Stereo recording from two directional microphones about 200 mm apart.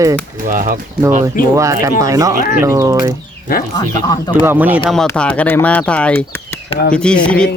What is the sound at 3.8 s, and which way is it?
Speech, 20° left (ahead or behind).